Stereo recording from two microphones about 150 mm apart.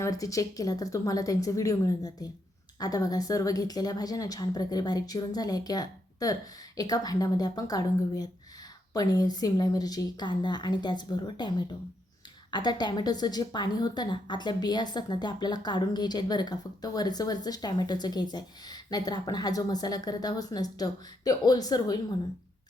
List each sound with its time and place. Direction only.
0.0 s a woman's voice: 20° left (ahead or behind)